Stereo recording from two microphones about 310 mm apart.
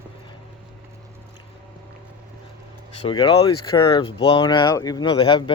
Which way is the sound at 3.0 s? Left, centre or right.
Centre.